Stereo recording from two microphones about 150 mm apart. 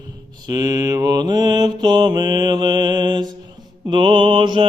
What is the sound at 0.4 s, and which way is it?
Mantra, 25° right (ahead or behind).